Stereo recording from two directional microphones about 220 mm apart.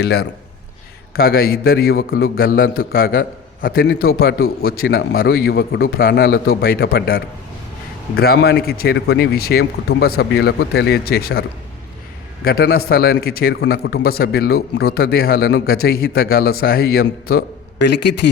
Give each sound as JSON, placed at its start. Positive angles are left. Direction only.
{"t": 0.0, "sound": "a man's voice", "side_deg": 45}